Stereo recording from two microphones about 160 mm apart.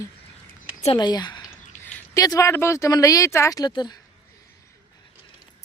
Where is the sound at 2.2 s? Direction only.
20° left (ahead or behind).